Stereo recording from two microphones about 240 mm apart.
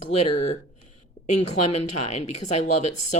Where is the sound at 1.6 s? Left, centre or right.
Left.